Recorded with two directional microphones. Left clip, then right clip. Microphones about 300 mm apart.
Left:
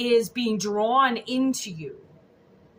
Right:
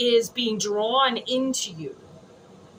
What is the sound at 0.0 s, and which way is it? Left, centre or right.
Speech, centre.